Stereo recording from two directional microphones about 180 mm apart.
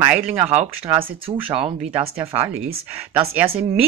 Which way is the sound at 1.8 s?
10° right (ahead or behind).